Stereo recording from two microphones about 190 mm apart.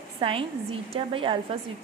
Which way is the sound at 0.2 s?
30° right (ahead or behind).